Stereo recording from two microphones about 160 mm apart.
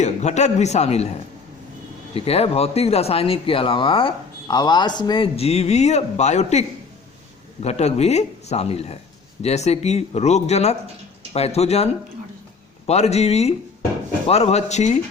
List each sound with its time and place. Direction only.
0.0 s speech: 45° left (ahead or behind)
2.1 s speech: 40° left (ahead or behind)
12.9 s speech: 40° left (ahead or behind)